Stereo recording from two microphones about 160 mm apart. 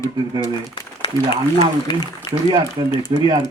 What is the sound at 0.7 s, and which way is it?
Speech, 35° left (ahead or behind).